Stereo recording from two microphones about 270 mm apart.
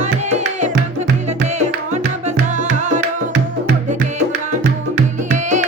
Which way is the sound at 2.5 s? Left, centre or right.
Right.